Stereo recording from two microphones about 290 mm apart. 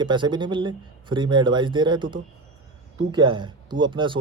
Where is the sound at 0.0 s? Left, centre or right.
Centre.